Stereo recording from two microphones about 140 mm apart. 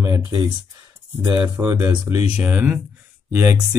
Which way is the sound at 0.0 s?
30° right (ahead or behind).